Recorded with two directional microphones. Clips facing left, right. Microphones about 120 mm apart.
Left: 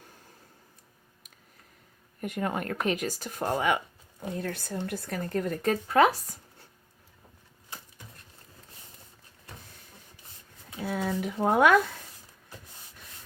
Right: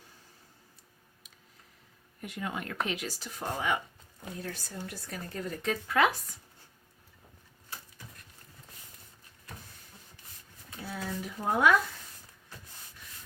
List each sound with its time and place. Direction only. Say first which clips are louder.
2.2 s speech: left 6 dB; 50° left (ahead or behind)
10.8 s speech: left 7 dB; 65° left (ahead or behind)